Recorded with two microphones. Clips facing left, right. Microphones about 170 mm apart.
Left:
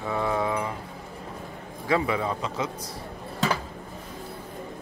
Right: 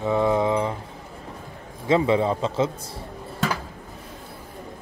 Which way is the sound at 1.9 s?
25° right (ahead or behind).